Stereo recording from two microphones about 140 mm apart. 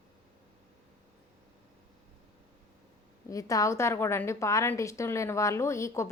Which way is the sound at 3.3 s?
25° left (ahead or behind).